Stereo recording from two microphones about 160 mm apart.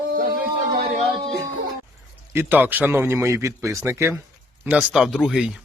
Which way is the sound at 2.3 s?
10° right (ahead or behind).